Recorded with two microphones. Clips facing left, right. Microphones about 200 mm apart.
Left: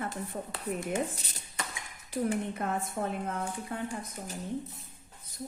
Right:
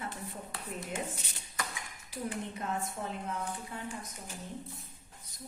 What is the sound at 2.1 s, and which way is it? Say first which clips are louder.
A woman's voice: left 7 dB; 55° left (ahead or behind).